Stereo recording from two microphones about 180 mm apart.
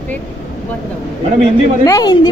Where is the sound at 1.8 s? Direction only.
20° left (ahead or behind).